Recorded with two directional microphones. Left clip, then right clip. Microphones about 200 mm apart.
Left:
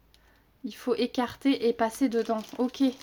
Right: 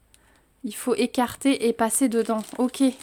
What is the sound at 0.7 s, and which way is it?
Speech, 25° right (ahead or behind).